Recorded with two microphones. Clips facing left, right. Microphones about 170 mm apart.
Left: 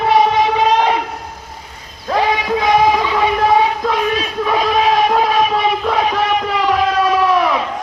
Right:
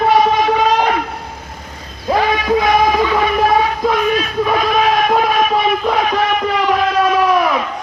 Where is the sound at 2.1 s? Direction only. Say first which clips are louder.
Right 1 dB; 10° right (ahead or behind).